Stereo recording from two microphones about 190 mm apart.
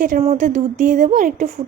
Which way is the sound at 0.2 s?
35° right (ahead or behind).